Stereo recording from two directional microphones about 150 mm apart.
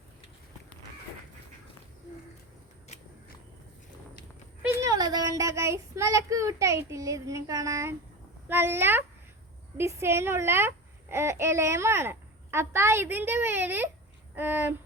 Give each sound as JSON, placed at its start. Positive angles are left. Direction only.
{"t": 2.9, "sound": "walk", "side_deg": 50}
{"t": 4.8, "sound": "a child's voice", "side_deg": -25}